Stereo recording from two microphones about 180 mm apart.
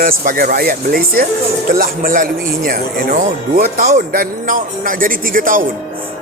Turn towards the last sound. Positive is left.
turn(degrees=-50)  # may be behind; listen again after turning